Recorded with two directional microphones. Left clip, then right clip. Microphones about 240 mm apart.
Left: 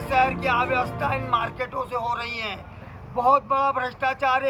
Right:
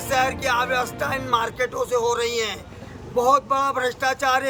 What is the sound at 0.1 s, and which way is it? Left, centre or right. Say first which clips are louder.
A man's voice: even; centre.